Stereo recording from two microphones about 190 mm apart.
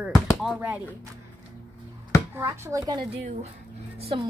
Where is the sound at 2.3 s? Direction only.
10° right (ahead or behind).